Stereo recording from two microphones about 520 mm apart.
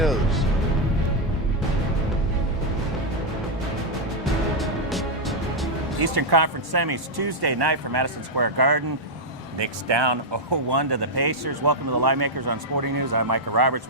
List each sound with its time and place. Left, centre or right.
0.0 s music: centre
4.5 s music: centre
6.0 s speech: right